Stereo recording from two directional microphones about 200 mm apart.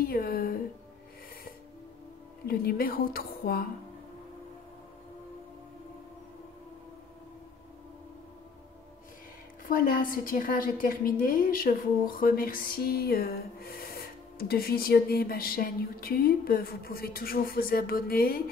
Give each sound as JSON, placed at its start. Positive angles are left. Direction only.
{"t": 0.0, "sound": "a sound", "side_deg": 45}
{"t": 2.4, "sound": "a woman's voice", "side_deg": 50}
{"t": 9.7, "sound": "a woman's voice", "side_deg": 45}